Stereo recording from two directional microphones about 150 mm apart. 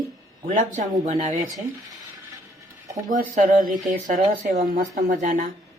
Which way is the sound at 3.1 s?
60° right (ahead or behind).